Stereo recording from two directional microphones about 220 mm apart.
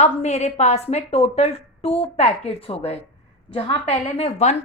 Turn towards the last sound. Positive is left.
turn(degrees=30)  # may be behind; listen again after turning